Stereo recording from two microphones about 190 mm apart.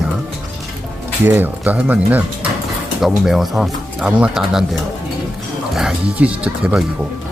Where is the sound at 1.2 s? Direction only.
10° right (ahead or behind).